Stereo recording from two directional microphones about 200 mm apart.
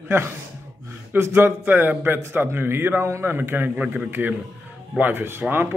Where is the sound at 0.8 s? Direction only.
10° right (ahead or behind).